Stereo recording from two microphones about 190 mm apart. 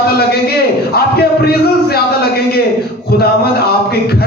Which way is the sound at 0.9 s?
55° left (ahead or behind).